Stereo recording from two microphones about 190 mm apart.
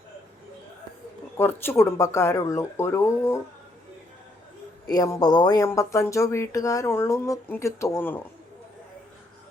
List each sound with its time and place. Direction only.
1.4 s speech: 10° left (ahead or behind)
4.9 s speech: 15° left (ahead or behind)